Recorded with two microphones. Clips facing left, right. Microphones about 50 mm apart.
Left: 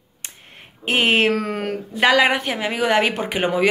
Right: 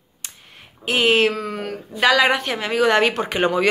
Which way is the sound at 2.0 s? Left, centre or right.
Left.